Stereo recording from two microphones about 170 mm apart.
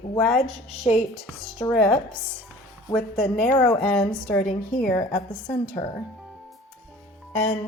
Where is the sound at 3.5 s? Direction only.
20° left (ahead or behind).